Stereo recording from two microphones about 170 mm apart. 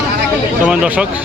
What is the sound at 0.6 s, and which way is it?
Speech, 5° right (ahead or behind).